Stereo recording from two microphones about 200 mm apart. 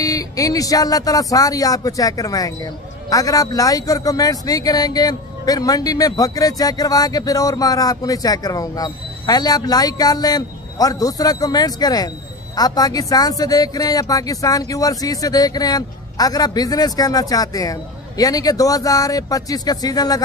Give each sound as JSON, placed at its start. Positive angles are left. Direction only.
{"t": 0.0, "sound": "speech", "side_deg": 15}